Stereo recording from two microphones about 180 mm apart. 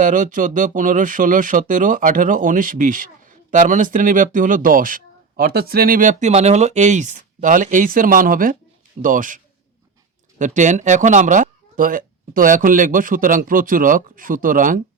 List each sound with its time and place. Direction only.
0.0 s speech: 45° right (ahead or behind)